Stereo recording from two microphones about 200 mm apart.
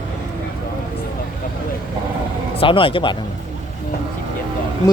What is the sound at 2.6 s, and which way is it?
Speech, 25° left (ahead or behind).